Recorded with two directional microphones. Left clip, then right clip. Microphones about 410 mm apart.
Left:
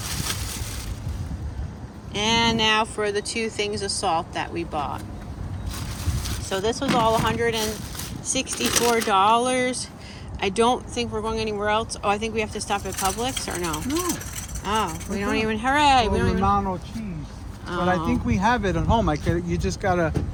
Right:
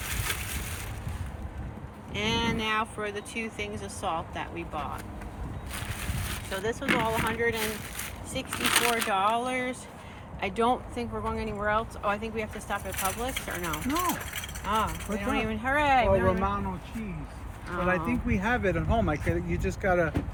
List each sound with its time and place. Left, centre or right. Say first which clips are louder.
2.1 s speech: left 8 dB; centre
6.5 s speech: left 5 dB; centre
17.7 s speech: left 5 dB; centre